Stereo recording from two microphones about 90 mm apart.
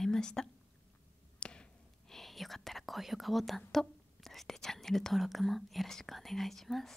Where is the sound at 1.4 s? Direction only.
10° left (ahead or behind).